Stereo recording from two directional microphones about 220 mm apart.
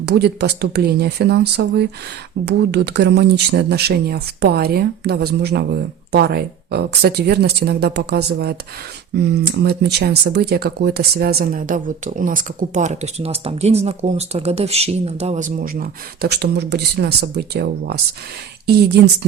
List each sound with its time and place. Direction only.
0.0 s speech: 50° right (ahead or behind)